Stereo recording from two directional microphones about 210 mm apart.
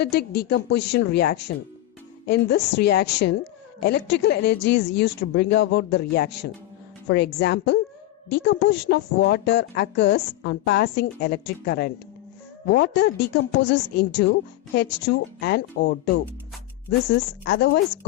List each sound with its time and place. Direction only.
0.0 s a woman's voice: 50° left (ahead or behind)
17.4 s a woman's voice: 55° left (ahead or behind)